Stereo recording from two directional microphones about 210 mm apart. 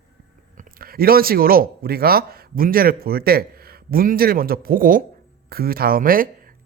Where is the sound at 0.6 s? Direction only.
45° right (ahead or behind).